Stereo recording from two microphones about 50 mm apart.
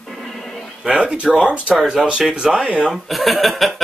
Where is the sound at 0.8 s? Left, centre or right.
Right.